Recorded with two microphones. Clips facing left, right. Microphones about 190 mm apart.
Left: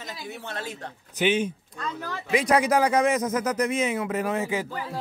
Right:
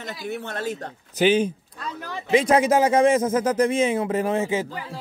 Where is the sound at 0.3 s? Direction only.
50° right (ahead or behind).